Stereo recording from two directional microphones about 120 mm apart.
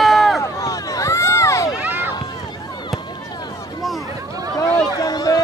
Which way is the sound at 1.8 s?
15° right (ahead or behind).